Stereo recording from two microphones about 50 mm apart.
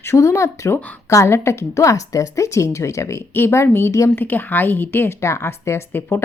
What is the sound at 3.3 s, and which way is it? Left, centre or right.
Speech, left.